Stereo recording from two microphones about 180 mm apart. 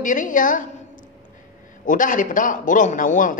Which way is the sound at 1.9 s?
45° left (ahead or behind).